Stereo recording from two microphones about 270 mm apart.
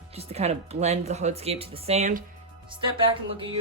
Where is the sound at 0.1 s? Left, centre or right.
Right.